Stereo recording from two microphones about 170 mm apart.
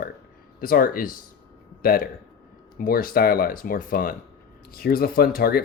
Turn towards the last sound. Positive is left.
turn(degrees=60)  # may be behind; listen again after turning